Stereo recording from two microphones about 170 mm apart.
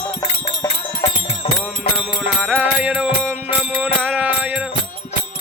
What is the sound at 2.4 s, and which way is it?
Music, 10° right (ahead or behind).